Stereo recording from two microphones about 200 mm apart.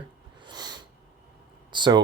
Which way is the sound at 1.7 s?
20° right (ahead or behind).